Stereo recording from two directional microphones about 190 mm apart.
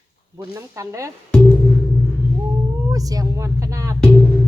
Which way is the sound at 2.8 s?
20° right (ahead or behind).